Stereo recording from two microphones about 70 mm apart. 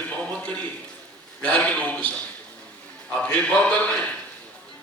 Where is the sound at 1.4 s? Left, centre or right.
Centre.